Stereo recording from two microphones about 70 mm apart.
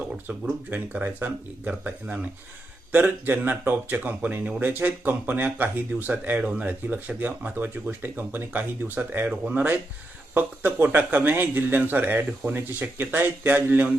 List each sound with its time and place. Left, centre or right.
0.3 s speech: right